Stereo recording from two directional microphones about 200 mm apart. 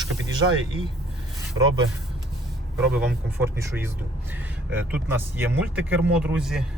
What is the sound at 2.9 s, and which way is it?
Speech, 10° right (ahead or behind).